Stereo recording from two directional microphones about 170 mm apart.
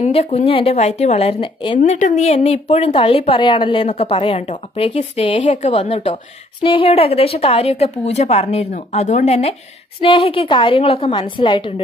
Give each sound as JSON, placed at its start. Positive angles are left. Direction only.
{"t": 0.0, "sound": "speech", "side_deg": 35}
{"t": 1.8, "sound": "speech", "side_deg": 45}